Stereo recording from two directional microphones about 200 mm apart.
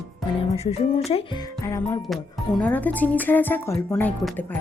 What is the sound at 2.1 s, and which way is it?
Speech, 5° left (ahead or behind).